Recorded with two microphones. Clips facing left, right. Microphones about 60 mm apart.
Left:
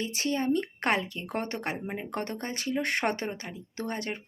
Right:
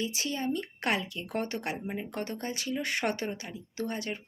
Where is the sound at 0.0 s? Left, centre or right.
Left.